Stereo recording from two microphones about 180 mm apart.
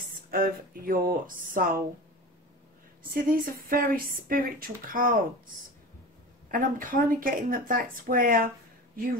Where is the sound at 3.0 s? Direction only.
50° right (ahead or behind).